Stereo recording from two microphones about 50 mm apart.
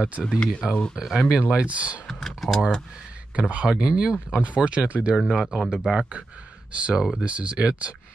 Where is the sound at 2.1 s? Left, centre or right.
Centre.